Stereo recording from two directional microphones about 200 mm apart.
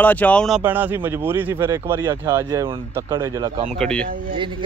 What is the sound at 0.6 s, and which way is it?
Speech, 10° right (ahead or behind).